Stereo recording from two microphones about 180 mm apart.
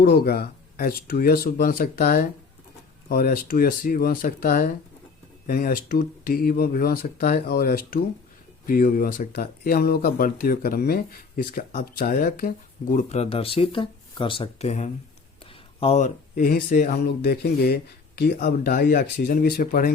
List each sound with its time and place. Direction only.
0.0 s speech: 60° left (ahead or behind)